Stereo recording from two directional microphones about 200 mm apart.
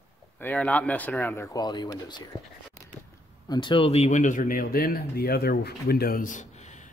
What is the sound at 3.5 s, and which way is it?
Speech, 25° left (ahead or behind).